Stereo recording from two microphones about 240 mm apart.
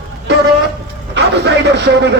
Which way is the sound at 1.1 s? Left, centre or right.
Right.